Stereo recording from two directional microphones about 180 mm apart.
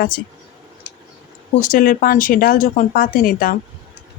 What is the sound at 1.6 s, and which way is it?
Speech, 50° left (ahead or behind).